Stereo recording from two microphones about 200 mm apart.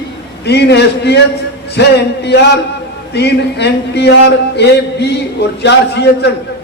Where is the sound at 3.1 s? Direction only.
55° left (ahead or behind).